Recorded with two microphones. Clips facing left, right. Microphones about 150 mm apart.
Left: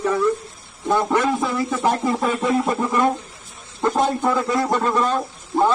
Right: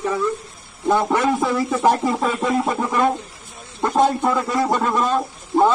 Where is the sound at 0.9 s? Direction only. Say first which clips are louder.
Even; 20° right (ahead or behind).